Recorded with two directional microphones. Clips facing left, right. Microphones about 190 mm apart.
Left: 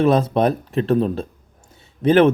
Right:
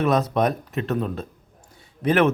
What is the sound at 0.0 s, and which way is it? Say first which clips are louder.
Speech: left 4 dB; 30° left (ahead or behind).